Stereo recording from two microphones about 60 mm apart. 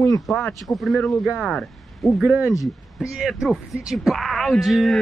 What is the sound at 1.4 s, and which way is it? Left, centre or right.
Speech, centre.